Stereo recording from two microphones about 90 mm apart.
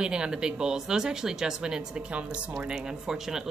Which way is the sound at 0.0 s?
10° right (ahead or behind).